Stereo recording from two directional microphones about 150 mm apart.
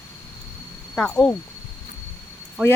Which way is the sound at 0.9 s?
5° left (ahead or behind).